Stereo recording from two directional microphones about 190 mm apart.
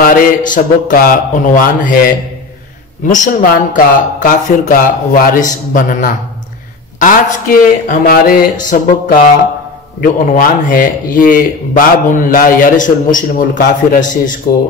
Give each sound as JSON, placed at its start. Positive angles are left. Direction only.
{"t": 0.0, "sound": "a man's voice", "side_deg": 45}
{"t": 3.1, "sound": "a man's voice", "side_deg": 45}